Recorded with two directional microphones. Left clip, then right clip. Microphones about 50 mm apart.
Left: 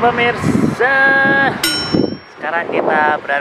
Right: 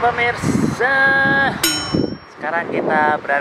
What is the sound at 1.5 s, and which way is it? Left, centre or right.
Music, centre.